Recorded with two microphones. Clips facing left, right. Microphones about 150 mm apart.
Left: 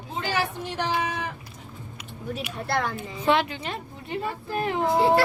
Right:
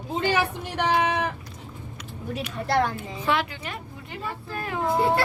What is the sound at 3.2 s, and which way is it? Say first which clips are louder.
A woman's voice: left 3 dB; 25° left (ahead or behind).